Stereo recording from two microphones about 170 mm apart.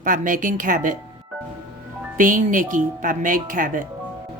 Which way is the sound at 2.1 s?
50° right (ahead or behind).